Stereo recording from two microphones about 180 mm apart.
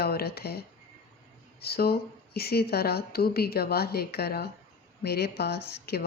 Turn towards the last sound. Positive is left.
turn(degrees=65)  # may be behind; listen again after turning